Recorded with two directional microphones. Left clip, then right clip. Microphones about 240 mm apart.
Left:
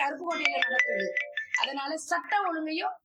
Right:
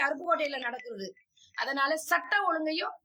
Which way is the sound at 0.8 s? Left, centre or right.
Left.